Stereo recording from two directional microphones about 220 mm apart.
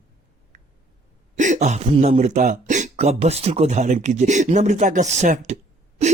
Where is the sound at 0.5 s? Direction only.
30° right (ahead or behind).